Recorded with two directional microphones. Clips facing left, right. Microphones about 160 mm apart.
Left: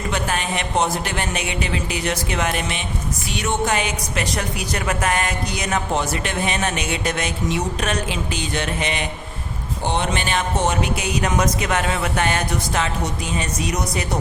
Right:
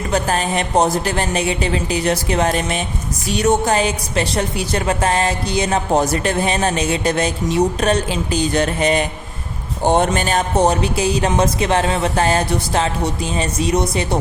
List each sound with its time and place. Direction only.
0.1 s a woman's voice: 35° right (ahead or behind)